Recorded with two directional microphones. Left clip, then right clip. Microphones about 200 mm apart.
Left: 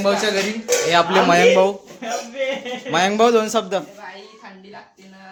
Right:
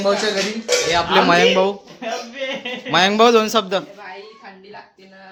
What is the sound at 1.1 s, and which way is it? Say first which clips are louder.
Speech: right 1 dB; 5° right (ahead or behind).